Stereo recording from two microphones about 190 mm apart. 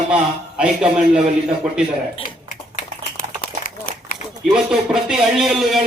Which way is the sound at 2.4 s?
45° left (ahead or behind).